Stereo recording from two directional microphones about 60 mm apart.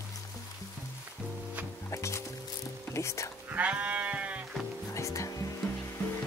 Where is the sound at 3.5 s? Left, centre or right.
Right.